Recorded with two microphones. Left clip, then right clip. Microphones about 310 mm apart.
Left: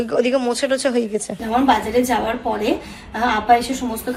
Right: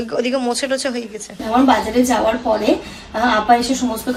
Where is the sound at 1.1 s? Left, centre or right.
Centre.